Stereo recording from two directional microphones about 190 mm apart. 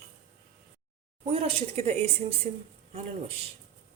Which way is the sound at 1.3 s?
30° right (ahead or behind).